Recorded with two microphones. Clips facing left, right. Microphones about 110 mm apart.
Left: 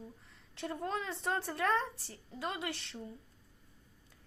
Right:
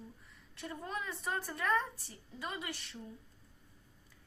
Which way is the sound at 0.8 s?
90° left.